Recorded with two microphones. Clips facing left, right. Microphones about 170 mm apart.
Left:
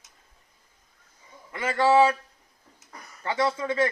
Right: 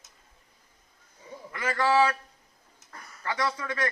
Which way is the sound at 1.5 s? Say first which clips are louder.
Left 4 dB; 25° left (ahead or behind).